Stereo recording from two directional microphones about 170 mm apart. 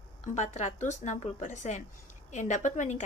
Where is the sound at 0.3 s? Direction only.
45° left (ahead or behind).